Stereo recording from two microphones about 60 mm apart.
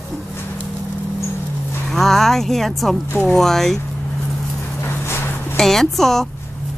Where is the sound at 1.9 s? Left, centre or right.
Centre.